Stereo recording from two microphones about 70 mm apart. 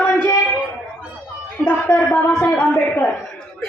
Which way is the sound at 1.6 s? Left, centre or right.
Left.